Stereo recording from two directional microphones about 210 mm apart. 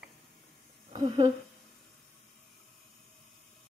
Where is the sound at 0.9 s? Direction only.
20° right (ahead or behind).